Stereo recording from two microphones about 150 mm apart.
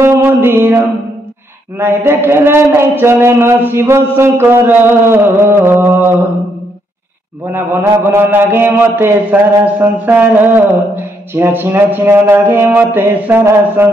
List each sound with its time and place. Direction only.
0.0 s mantra: 15° right (ahead or behind)
7.5 s mantra: 15° right (ahead or behind)